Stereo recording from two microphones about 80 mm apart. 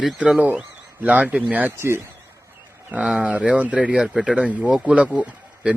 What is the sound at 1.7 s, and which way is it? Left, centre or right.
Speech, right.